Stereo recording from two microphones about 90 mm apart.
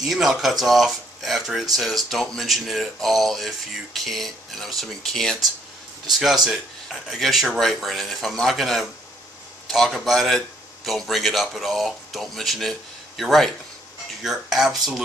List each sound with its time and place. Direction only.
0.0 s speech: centre (ahead or behind)